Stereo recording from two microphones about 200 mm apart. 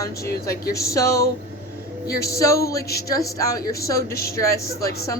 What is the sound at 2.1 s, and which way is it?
Speech, 50° left (ahead or behind).